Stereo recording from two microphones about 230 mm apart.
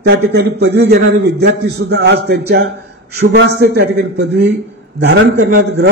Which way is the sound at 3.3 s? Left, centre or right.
Right.